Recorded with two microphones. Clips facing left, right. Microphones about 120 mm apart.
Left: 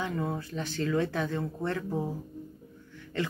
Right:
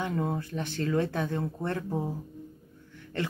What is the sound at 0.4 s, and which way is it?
Speech, 55° right (ahead or behind).